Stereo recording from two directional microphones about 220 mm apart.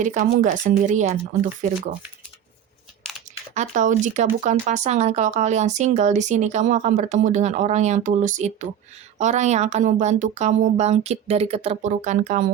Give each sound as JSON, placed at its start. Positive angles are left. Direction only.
{"t": 0.0, "sound": "speech", "side_deg": -35}
{"t": 3.5, "sound": "speech", "side_deg": -35}